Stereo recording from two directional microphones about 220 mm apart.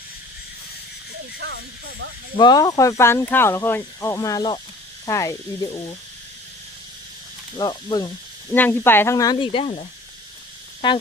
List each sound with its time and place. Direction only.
2.3 s speech: 20° left (ahead or behind)
7.6 s speech: 20° left (ahead or behind)
10.8 s speech: 20° left (ahead or behind)